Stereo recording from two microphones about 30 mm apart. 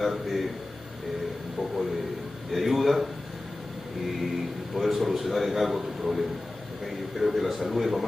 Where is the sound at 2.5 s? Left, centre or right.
Centre.